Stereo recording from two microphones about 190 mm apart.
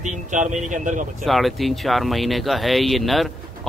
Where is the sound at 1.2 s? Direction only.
Centre (ahead or behind).